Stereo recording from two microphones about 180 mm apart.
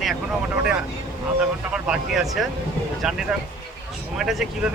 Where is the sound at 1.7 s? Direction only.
5° right (ahead or behind).